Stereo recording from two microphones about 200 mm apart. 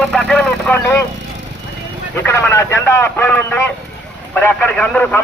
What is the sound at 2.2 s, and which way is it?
A man's voice, 10° left (ahead or behind).